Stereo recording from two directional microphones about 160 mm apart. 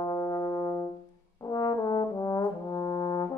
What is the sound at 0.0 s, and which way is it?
Music, 25° left (ahead or behind).